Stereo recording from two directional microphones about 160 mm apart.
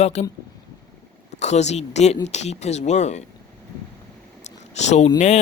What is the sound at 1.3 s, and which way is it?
Speech, 45° left (ahead or behind).